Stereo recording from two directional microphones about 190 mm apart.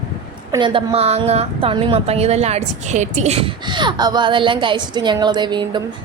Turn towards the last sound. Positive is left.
turn(degrees=-25)  # may be behind; listen again after turning